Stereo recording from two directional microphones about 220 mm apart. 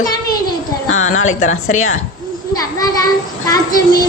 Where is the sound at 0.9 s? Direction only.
65° left (ahead or behind).